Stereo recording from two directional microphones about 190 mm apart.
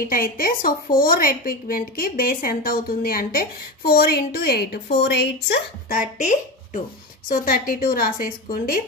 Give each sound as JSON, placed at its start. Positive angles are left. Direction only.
{"t": 0.1, "sound": "a woman's voice", "side_deg": 50}